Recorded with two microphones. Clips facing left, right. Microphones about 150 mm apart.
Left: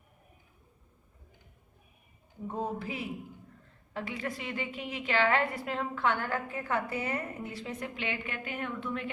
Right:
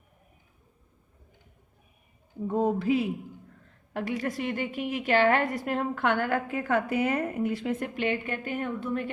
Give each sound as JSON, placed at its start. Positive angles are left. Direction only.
{"t": 2.5, "sound": "speech", "side_deg": -70}
{"t": 3.9, "sound": "a woman's voice", "side_deg": -45}